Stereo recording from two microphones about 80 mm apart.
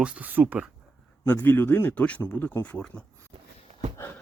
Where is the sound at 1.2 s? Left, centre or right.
Left.